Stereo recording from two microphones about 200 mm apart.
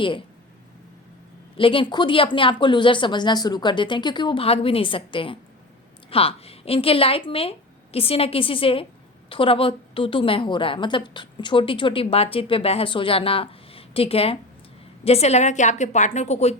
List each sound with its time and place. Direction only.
1.5 s a woman's voice: 25° left (ahead or behind)